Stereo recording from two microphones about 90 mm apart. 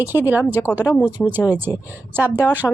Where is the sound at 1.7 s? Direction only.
35° left (ahead or behind).